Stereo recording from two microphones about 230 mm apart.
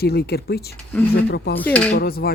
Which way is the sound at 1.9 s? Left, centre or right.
Left.